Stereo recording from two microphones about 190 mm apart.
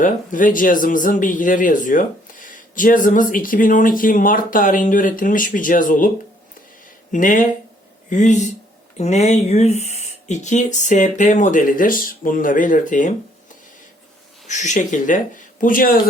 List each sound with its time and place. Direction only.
0.0 s speech: 45° left (ahead or behind)
7.1 s speech: 45° left (ahead or behind)
14.4 s speech: 40° left (ahead or behind)